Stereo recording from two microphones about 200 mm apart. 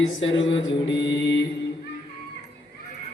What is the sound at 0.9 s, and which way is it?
Speech, 65° left (ahead or behind).